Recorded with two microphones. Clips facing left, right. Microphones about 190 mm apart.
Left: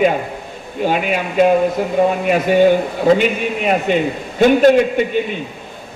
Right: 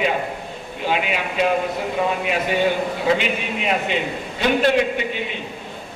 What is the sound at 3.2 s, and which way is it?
Speech, 45° left (ahead or behind).